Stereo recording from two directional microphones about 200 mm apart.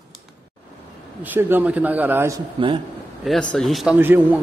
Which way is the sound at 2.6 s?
25° right (ahead or behind).